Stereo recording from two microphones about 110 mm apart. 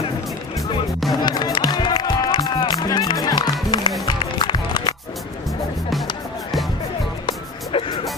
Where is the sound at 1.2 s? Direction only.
40° left (ahead or behind).